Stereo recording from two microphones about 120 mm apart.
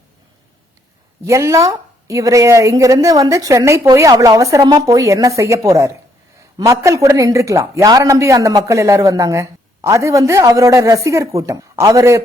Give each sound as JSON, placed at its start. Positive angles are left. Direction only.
{"t": 1.2, "sound": "a man's voice", "side_deg": -25}